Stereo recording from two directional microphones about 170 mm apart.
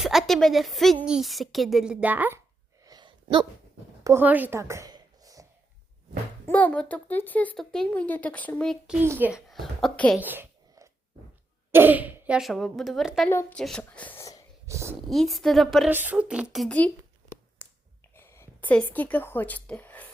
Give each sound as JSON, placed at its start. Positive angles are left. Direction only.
{"t": 0.0, "sound": "a woman's voice", "side_deg": 0}
{"t": 2.8, "sound": "sneeze", "side_deg": -25}
{"t": 4.0, "sound": "a sound", "side_deg": -15}
{"t": 6.5, "sound": "speech", "side_deg": 10}
{"t": 9.0, "sound": "speech", "side_deg": -10}
{"t": 9.5, "sound": "a woman's voice", "side_deg": 0}
{"t": 10.2, "sound": "a sound", "side_deg": -10}
{"t": 11.7, "sound": "a woman's voice", "side_deg": -10}
{"t": 14.7, "sound": "speech", "side_deg": -15}
{"t": 15.1, "sound": "a woman's voice", "side_deg": 0}
{"t": 15.9, "sound": "speech", "side_deg": -10}
{"t": 16.6, "sound": "speech", "side_deg": 5}
{"t": 17.6, "sound": "finger snapping", "side_deg": 10}
{"t": 18.1, "sound": "speech", "side_deg": 15}